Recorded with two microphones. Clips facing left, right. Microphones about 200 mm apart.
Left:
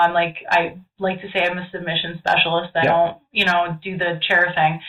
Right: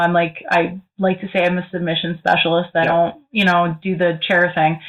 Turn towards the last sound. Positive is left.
turn(degrees=-50)  # may be behind; listen again after turning